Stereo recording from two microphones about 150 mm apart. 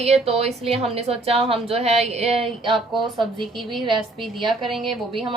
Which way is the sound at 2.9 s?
Centre (ahead or behind).